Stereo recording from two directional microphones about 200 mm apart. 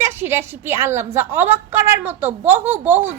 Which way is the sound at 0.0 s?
10° right (ahead or behind).